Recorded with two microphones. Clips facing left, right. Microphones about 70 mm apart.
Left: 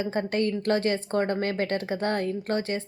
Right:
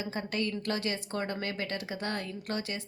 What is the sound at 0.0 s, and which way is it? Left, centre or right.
Speech, left.